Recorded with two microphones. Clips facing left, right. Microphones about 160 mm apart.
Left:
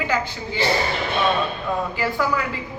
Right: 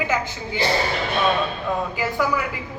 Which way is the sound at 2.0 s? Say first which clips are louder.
Even; 15° right (ahead or behind).